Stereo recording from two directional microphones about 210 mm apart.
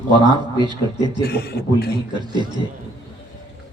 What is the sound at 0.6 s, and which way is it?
Speech, 20° right (ahead or behind).